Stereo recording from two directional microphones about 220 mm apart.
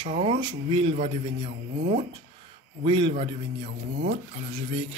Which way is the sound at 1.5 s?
40° right (ahead or behind).